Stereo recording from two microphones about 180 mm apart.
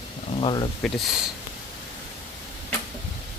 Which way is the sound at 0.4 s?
25° left (ahead or behind).